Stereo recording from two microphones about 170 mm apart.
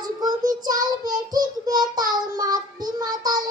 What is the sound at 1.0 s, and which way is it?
Child singing, 25° right (ahead or behind).